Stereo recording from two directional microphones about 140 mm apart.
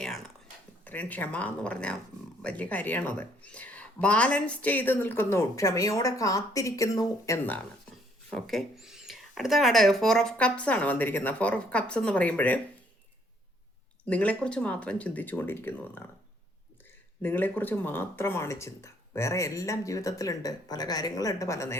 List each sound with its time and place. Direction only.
0.0 s a sound: centre (ahead or behind)
0.9 s speech: 10° left (ahead or behind)
8.3 s speech: centre (ahead or behind)
14.0 s speech: 10° left (ahead or behind)
17.2 s speech: 15° left (ahead or behind)